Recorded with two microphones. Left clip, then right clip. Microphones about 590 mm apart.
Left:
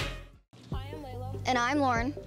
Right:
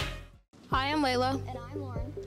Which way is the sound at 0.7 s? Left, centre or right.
Right.